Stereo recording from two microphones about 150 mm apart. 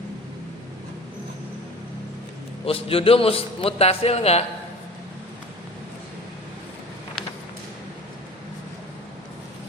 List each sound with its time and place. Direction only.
2.6 s a man's voice: 40° left (ahead or behind)